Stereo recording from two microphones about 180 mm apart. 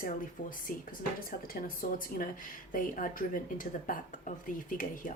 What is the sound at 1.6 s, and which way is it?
Speech, 50° left (ahead or behind).